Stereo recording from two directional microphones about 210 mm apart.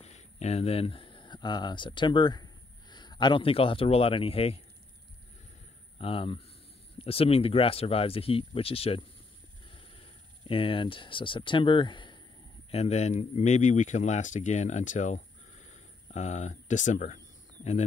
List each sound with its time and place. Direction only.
0.0 s speech: 30° left (ahead or behind)
5.9 s speech: 25° left (ahead or behind)